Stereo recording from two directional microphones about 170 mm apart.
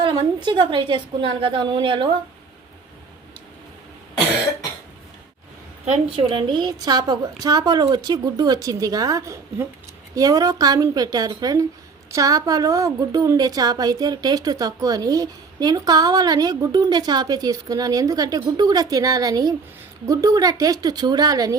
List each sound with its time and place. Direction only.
0.0 s a woman's voice: 25° right (ahead or behind)
5.8 s a woman's voice: 40° right (ahead or behind)
6.2 s a woman's voice: 25° right (ahead or behind)